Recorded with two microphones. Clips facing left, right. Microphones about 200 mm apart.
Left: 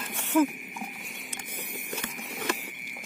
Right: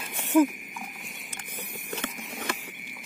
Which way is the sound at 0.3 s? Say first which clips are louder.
Right 3 dB; 15° right (ahead or behind).